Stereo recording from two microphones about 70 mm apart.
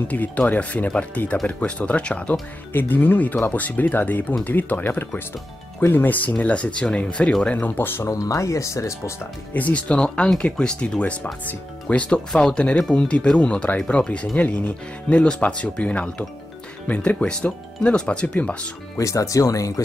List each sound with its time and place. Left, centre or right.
0.1 s speech: left
2.7 s speech: left
8.0 s speech: left
9.5 s speech: left
18.9 s speech: left